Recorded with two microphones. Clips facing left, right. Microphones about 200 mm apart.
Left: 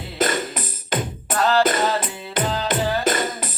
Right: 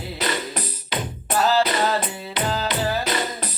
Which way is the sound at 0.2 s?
50° left (ahead or behind).